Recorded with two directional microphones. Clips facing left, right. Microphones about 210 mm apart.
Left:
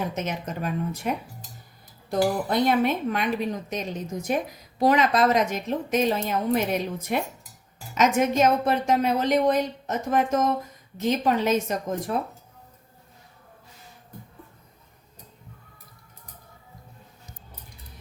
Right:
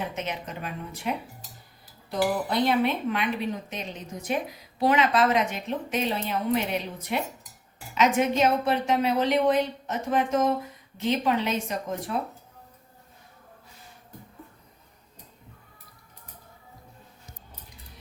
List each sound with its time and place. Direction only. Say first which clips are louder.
0.2 s a woman's voice: left 4 dB; 45° left (ahead or behind)